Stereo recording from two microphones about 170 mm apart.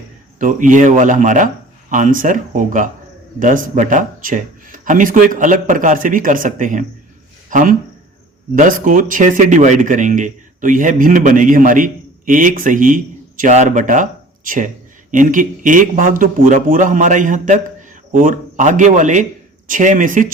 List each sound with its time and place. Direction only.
0.3 s speech: 50° right (ahead or behind)